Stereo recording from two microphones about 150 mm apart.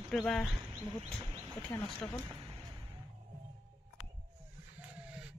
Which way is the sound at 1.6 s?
15° left (ahead or behind).